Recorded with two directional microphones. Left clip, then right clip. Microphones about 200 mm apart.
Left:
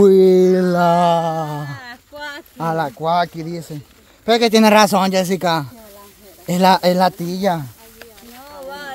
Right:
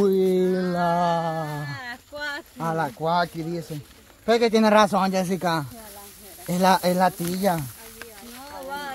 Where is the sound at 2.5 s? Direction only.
50° left (ahead or behind).